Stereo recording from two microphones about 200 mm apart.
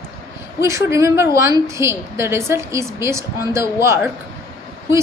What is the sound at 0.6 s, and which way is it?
A woman's voice, 15° right (ahead or behind).